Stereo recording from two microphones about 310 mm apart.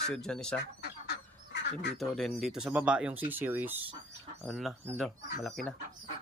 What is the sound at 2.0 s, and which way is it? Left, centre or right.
Speech, centre.